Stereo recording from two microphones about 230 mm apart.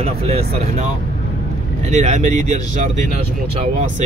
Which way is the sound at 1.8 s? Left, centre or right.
Right.